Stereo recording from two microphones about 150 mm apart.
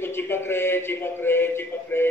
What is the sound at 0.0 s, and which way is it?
A man's voice, 15° left (ahead or behind).